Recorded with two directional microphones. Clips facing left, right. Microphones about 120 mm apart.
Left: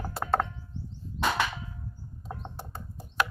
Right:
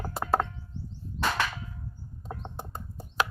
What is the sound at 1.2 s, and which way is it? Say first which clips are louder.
Cap gun: left 1 dB; 20° left (ahead or behind).